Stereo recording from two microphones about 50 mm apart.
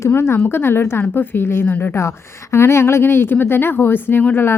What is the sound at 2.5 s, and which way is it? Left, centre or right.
Speech, left.